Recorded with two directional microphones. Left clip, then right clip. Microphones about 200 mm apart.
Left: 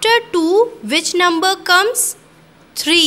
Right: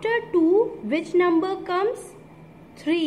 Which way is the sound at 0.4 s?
90° left.